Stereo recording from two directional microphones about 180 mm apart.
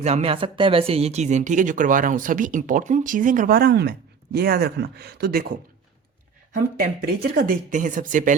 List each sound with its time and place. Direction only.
0.0 s speech: 35° right (ahead or behind)